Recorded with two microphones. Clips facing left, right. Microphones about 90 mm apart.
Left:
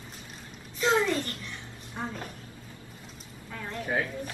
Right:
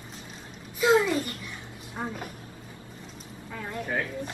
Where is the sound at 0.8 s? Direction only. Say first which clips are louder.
Right 3 dB; 10° right (ahead or behind).